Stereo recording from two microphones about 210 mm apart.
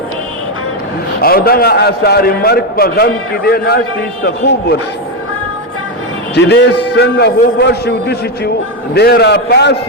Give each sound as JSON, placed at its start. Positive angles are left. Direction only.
{"t": 1.2, "sound": "a man's voice", "side_deg": 45}
{"t": 6.3, "sound": "a man's voice", "side_deg": 55}